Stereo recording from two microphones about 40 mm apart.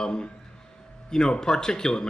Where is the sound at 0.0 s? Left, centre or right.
Centre.